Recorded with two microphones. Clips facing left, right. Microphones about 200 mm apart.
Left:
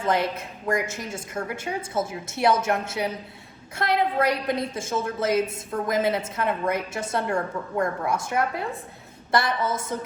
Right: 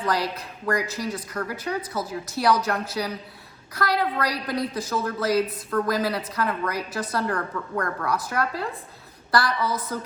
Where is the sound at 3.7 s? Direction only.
25° left (ahead or behind).